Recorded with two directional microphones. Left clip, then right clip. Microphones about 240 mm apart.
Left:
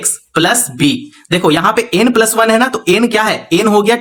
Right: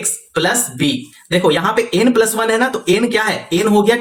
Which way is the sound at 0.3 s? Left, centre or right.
Left.